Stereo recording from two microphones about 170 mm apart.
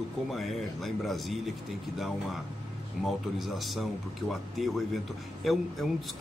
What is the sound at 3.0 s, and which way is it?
Speech, centre (ahead or behind).